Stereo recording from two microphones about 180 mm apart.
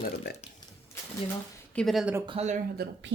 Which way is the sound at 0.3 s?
65° left (ahead or behind).